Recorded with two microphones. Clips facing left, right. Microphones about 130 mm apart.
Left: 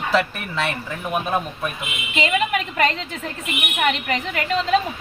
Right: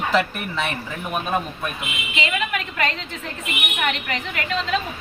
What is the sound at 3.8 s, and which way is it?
Speech, 40° left (ahead or behind).